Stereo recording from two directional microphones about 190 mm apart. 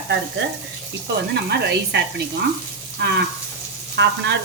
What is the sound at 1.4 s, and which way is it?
Speech, 60° right (ahead or behind).